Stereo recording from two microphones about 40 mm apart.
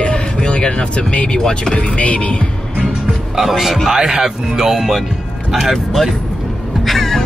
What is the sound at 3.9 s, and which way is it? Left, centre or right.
Speech, centre.